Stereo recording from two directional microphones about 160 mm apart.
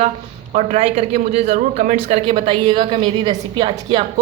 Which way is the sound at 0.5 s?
45° right (ahead or behind).